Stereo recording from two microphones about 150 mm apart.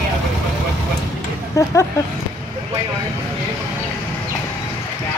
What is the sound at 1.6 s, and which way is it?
Speech, 20° left (ahead or behind).